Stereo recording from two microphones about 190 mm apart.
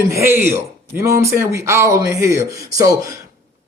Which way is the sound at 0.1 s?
15° right (ahead or behind).